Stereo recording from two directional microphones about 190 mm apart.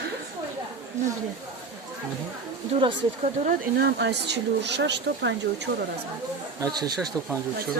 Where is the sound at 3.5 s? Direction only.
55° right (ahead or behind).